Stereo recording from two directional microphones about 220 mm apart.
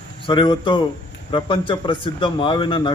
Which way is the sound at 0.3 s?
20° left (ahead or behind).